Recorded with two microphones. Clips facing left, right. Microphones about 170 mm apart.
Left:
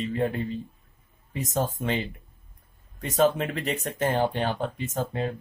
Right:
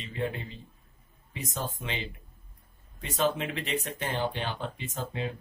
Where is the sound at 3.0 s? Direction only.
45° left (ahead or behind).